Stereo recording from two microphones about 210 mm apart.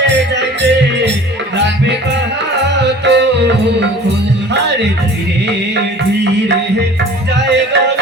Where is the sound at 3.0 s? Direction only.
55° right (ahead or behind).